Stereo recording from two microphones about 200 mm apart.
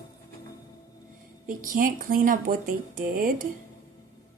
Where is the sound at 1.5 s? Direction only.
45° right (ahead or behind).